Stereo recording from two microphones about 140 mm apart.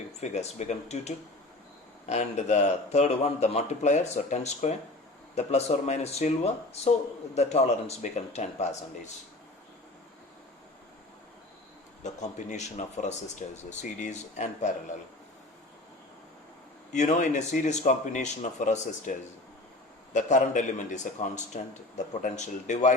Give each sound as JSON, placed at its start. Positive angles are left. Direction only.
{"t": 0.2, "sound": "a man's voice", "side_deg": 50}
{"t": 12.0, "sound": "a man's voice", "side_deg": 60}
{"t": 16.9, "sound": "a man's voice", "side_deg": 60}
{"t": 20.1, "sound": "a man's voice", "side_deg": 65}